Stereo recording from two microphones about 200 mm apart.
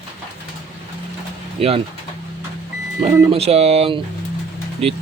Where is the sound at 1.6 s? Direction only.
30° right (ahead or behind).